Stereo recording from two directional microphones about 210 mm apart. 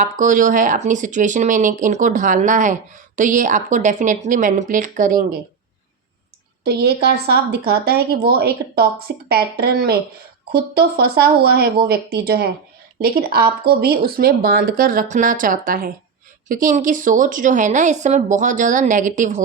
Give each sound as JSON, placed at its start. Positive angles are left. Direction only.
{"t": 0.0, "sound": "speech", "side_deg": -40}
{"t": 6.7, "sound": "speech", "side_deg": -50}